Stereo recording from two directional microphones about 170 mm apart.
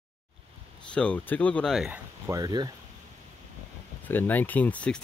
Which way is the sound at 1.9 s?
15° right (ahead or behind).